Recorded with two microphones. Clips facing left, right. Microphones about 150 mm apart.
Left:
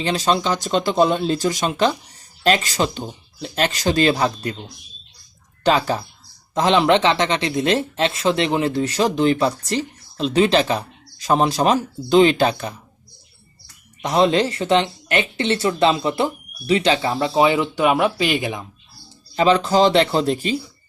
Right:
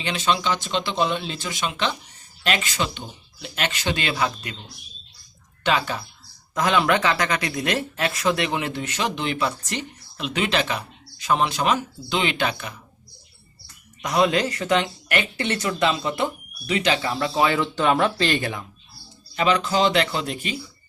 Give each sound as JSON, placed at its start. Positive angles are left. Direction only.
{"t": 0.0, "sound": "speech", "side_deg": 35}
{"t": 5.6, "sound": "speech", "side_deg": 35}
{"t": 6.5, "sound": "speech", "side_deg": 25}
{"t": 14.0, "sound": "speech", "side_deg": 30}
{"t": 19.4, "sound": "speech", "side_deg": 35}